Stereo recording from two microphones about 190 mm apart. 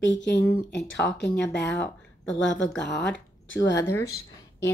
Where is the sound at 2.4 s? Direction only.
70° left (ahead or behind).